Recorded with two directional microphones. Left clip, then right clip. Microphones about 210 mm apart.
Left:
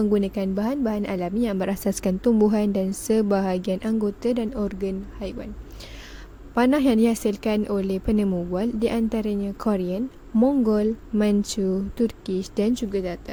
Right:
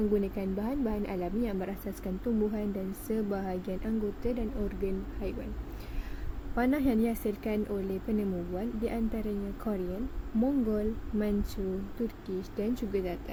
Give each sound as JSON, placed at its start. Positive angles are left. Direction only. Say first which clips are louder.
{"t": 0.1, "sound": "a woman's voice", "louder": "left 7 dB", "side_deg": 45}
{"t": 6.5, "sound": "a woman's voice", "louder": "left 9 dB", "side_deg": 45}